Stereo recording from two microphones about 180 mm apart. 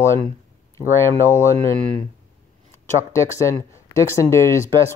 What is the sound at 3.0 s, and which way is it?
Speech, 15° left (ahead or behind).